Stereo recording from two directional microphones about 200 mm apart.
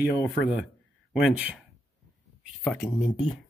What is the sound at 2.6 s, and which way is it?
Speech, 10° left (ahead or behind).